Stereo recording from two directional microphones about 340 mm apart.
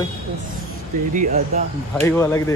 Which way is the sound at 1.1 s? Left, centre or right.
Right.